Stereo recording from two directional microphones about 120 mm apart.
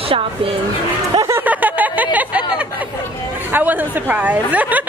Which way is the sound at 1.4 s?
15° right (ahead or behind).